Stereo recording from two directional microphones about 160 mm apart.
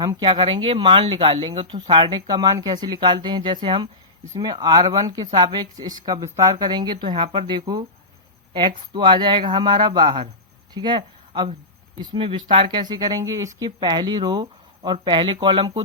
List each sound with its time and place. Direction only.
0.0 s speech: 25° right (ahead or behind)